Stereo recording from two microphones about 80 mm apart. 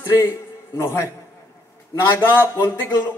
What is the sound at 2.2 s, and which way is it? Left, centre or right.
Music, left.